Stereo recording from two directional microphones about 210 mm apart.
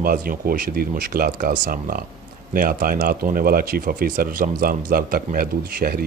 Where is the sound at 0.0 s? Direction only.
45° right (ahead or behind).